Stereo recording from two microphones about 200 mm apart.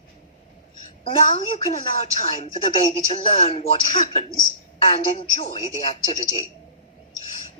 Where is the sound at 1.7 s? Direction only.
35° left (ahead or behind).